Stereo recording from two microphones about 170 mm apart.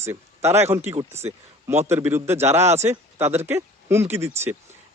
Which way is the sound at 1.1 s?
40° right (ahead or behind).